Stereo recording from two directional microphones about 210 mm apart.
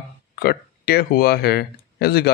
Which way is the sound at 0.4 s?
45° left (ahead or behind).